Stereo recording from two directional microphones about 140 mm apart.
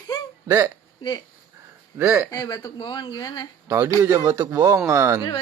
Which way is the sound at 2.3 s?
25° left (ahead or behind).